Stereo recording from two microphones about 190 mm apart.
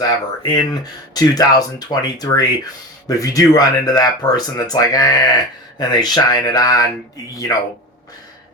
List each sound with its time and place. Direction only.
0.4 s speech: 20° left (ahead or behind)